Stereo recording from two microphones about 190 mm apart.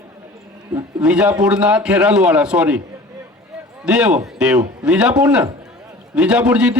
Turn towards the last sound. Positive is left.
turn(degrees=-5)  # may be behind; listen again after turning